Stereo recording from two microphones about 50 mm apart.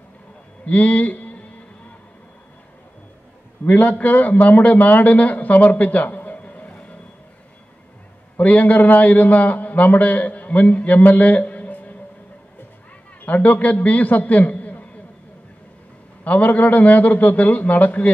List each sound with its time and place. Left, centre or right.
0.7 s a man's voice: left
3.6 s a man's voice: left
8.4 s a man's voice: left
13.2 s a man's voice: left
16.3 s a man's voice: left